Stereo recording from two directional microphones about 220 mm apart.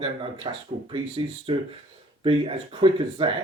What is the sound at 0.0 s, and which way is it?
Speech, 20° right (ahead or behind).